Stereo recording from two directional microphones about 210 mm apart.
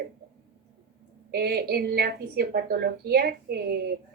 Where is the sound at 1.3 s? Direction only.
50° right (ahead or behind).